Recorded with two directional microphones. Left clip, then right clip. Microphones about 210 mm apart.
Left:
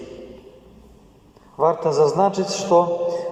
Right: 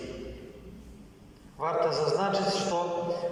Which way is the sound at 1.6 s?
50° left (ahead or behind).